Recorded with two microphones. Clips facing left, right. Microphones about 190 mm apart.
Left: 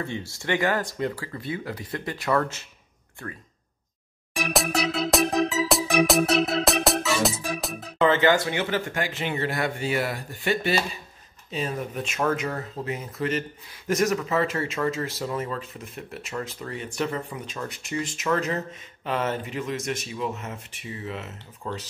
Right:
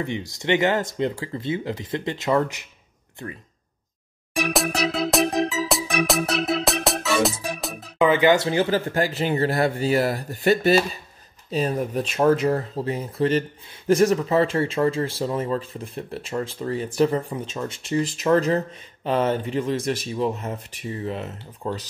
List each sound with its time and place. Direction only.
0.0 s speech: 20° right (ahead or behind)
5.1 s music: centre (ahead or behind)
8.0 s speech: 15° right (ahead or behind)
8.5 s speech: 35° right (ahead or behind)